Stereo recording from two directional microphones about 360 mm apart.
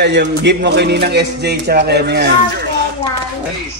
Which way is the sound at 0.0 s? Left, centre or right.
Right.